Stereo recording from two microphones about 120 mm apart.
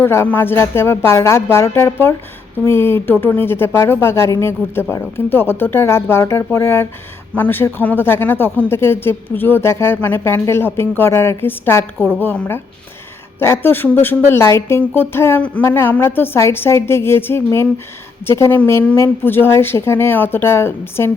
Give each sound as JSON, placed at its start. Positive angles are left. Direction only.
{"t": 0.0, "sound": "speech", "side_deg": 20}